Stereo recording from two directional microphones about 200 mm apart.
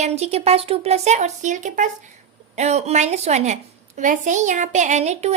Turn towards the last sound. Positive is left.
turn(degrees=-35)  # may be behind; listen again after turning